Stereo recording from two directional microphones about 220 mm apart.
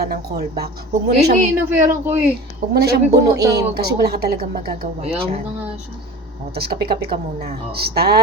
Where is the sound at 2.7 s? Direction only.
45° right (ahead or behind).